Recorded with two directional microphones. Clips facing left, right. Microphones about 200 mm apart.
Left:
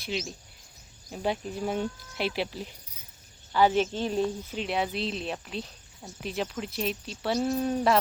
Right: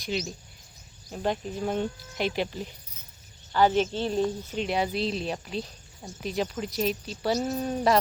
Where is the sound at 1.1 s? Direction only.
10° left (ahead or behind).